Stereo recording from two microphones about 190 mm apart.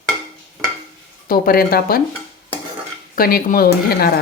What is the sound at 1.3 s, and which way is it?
Speech, 50° left (ahead or behind).